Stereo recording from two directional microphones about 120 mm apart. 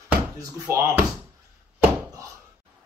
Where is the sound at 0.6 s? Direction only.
20° right (ahead or behind).